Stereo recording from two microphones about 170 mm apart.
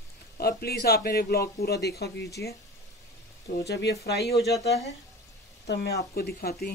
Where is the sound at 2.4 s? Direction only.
85° left.